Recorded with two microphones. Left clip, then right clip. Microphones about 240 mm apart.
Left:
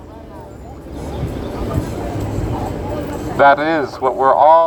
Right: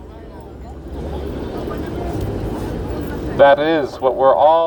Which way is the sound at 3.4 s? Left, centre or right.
Left.